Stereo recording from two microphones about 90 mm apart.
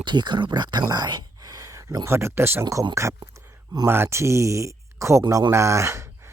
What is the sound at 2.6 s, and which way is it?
Speech, 40° right (ahead or behind).